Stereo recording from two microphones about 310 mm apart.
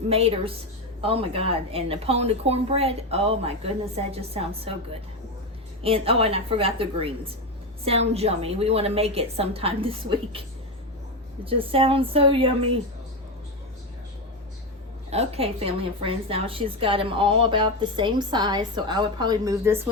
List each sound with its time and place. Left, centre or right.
0.1 s a woman's voice: centre
5.8 s a woman's voice: centre
11.4 s a woman's voice: centre
15.1 s a woman's voice: centre